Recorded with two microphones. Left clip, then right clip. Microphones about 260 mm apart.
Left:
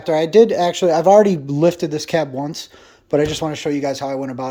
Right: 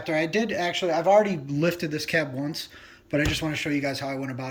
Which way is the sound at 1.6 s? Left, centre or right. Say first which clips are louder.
Left 9 dB; centre.